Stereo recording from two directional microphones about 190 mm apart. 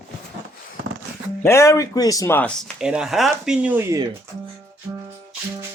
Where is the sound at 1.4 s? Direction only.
15° left (ahead or behind); by 4.0 s 10° right (ahead or behind).